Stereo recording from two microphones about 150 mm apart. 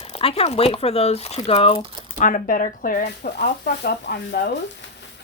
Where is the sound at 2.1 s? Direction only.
60° left (ahead or behind); by 4.4 s 90° left.